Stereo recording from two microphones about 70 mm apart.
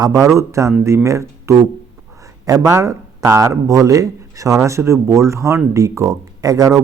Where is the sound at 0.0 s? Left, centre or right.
Right.